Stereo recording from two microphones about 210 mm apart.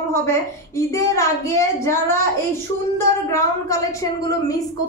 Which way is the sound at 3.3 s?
15° left (ahead or behind).